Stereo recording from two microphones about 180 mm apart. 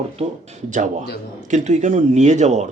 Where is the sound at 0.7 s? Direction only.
45° right (ahead or behind).